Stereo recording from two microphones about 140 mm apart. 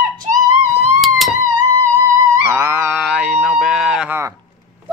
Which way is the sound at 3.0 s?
Centre (ahead or behind).